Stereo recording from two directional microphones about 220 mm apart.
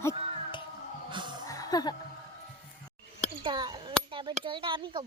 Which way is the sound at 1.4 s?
15° left (ahead or behind).